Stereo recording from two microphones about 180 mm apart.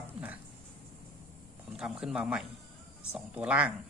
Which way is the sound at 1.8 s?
5° right (ahead or behind).